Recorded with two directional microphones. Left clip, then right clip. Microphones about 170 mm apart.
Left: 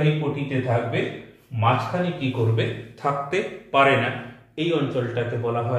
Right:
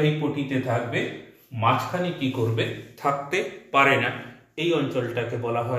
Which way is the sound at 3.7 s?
30° left (ahead or behind).